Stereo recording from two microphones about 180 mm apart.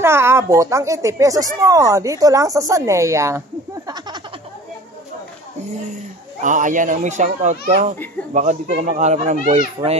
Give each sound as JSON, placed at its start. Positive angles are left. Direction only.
{"t": 0.0, "sound": "a woman's voice", "side_deg": -15}
{"t": 6.4, "sound": "speech", "side_deg": -45}